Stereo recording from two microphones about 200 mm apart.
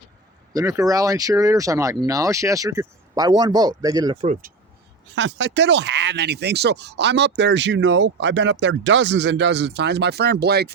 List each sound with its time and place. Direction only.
0.5 s speech: 15° right (ahead or behind)
4.3 s speech: 45° right (ahead or behind)
5.1 s speech: 65° right (ahead or behind)